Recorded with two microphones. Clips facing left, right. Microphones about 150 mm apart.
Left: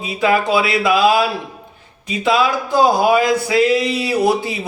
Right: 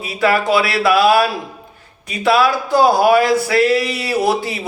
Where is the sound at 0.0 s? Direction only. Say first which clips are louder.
Even; 20° left (ahead or behind).